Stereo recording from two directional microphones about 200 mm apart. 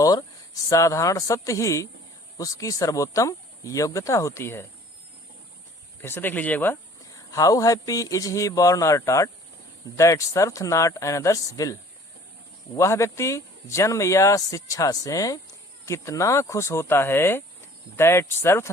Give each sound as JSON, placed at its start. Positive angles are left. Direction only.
{"t": 0.0, "sound": "speech", "side_deg": 20}
{"t": 6.0, "sound": "speech", "side_deg": 10}